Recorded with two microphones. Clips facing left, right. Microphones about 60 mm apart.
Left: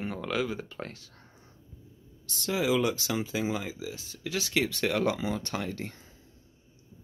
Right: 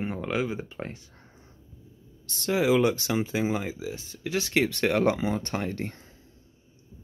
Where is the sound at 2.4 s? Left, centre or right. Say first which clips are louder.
Right 4 dB; right.